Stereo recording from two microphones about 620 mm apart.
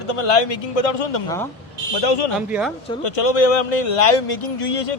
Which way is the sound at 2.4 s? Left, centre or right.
Centre.